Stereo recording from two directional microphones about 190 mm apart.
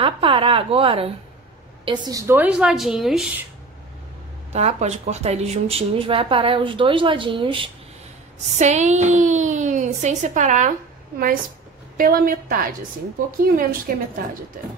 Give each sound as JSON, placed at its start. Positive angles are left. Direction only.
{"t": 0.0, "sound": "speech", "side_deg": -30}
{"t": 1.9, "sound": "a woman's voice", "side_deg": -20}
{"t": 4.5, "sound": "speech", "side_deg": -35}
{"t": 8.5, "sound": "a woman's voice", "side_deg": -40}
{"t": 12.0, "sound": "a woman's voice", "side_deg": -50}